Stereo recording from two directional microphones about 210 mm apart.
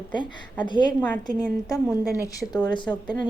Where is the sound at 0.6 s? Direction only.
20° left (ahead or behind).